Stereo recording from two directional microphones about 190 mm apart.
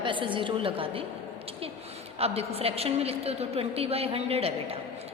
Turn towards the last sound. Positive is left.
turn(degrees=-30)  # may be behind; listen again after turning